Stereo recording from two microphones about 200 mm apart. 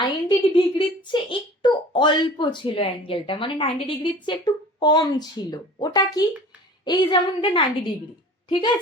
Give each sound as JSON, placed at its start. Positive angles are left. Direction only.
{"t": 0.0, "sound": "a woman's voice", "side_deg": 25}